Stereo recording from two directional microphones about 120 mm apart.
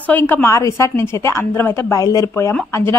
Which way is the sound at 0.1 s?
20° left (ahead or behind).